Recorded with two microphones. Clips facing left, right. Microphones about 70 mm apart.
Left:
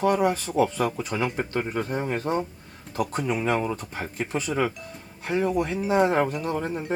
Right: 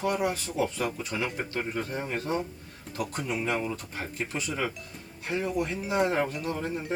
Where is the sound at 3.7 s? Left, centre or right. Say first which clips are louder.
Left 4 dB; left.